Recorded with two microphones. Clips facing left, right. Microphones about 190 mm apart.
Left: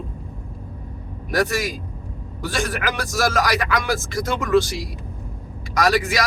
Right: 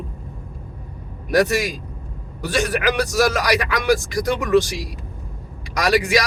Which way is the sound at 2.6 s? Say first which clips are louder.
Right 5 dB; 20° right (ahead or behind).